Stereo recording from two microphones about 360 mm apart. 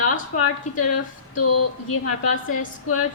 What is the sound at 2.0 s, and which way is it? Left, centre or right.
A woman's voice, left.